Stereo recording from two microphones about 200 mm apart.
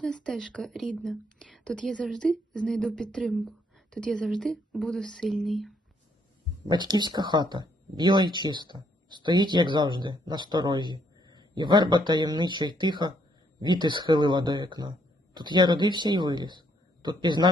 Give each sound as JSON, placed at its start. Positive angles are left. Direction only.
{"t": 0.0, "sound": "a woman's voice", "side_deg": 5}
{"t": 6.7, "sound": "speech", "side_deg": -20}